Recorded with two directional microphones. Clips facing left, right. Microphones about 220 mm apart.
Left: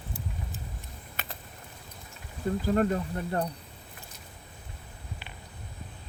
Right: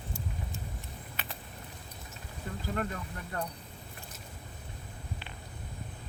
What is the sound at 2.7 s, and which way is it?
Speech, 35° left (ahead or behind).